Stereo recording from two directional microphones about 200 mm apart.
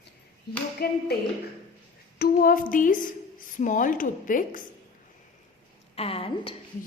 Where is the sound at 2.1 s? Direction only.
50° left (ahead or behind).